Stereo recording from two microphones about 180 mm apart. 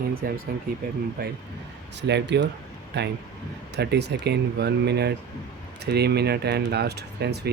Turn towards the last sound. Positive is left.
turn(degrees=-65)  # may be behind; listen again after turning